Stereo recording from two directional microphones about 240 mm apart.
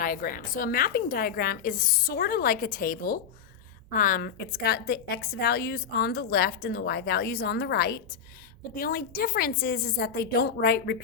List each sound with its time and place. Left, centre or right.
0.0 s a woman's voice: left